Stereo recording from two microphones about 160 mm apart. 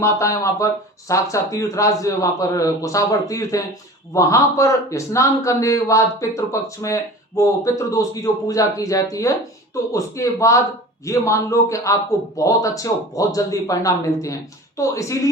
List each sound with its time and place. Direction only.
0.0 s a man's voice: 20° left (ahead or behind)